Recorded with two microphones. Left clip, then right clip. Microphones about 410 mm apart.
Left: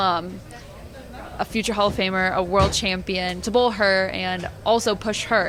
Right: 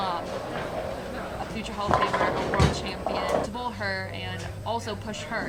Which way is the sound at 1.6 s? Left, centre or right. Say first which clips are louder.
Left 3 dB; left.